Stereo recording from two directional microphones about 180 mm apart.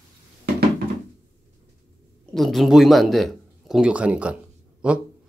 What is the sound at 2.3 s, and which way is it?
Speech, centre (ahead or behind).